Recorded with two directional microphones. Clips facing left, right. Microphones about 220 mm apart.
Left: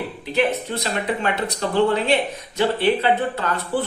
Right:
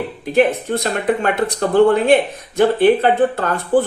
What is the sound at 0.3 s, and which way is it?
Speech, 50° right (ahead or behind).